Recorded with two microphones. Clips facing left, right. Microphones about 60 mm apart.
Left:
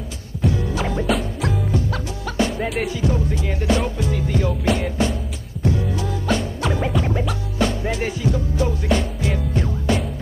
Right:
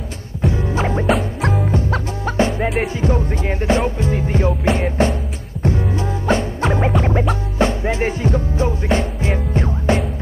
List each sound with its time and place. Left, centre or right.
0.4 s music: right
1.4 s music: right
1.7 s music: right